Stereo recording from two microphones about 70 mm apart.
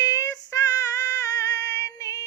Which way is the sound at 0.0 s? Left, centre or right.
Left.